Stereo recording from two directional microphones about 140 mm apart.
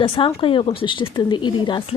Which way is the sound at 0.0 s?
40° left (ahead or behind).